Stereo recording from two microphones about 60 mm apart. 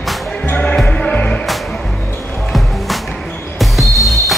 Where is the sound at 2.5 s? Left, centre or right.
Centre.